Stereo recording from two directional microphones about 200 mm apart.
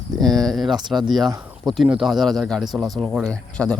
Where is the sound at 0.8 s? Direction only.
20° right (ahead or behind).